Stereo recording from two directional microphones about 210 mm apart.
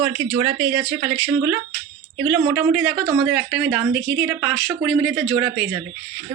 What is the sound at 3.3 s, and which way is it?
Speech, 10° right (ahead or behind).